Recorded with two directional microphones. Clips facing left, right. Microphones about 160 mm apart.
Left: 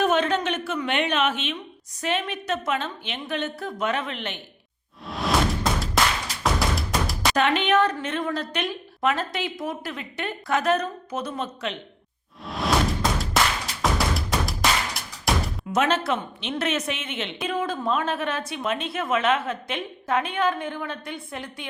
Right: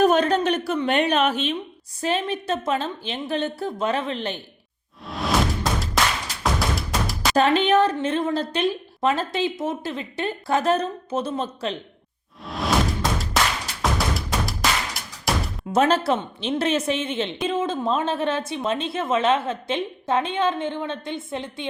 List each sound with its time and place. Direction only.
0.0 s a woman's voice: 40° right (ahead or behind)
5.0 s music: centre (ahead or behind)
7.3 s speech: 35° right (ahead or behind)
12.5 s music: centre (ahead or behind)
15.7 s speech: 35° right (ahead or behind)